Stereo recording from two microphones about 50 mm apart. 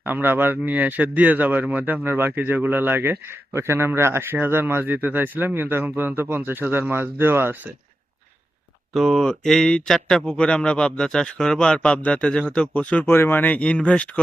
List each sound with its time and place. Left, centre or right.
0.0 s speech: right
8.9 s speech: centre
9.2 s speech: centre; by 13.1 s left
13.1 s speech: left
13.6 s speech: left